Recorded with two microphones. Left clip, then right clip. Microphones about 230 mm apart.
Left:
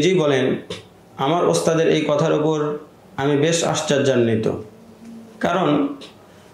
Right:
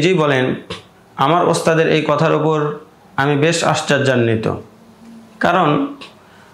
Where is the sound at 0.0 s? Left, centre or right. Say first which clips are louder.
Right 3 dB; right.